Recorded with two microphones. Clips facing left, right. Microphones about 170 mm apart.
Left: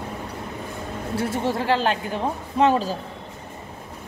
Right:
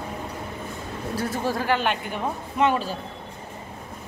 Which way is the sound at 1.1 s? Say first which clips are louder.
Left 2 dB; 25° left (ahead or behind).